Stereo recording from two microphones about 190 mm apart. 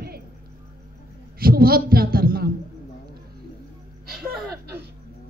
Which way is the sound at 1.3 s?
50° right (ahead or behind).